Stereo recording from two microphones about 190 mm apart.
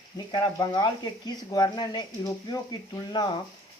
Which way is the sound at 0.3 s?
20° left (ahead or behind).